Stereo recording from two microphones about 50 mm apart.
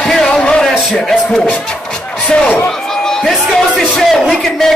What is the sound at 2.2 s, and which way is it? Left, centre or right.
Speech, left.